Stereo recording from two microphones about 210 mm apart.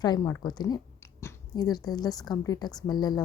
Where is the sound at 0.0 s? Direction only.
15° left (ahead or behind).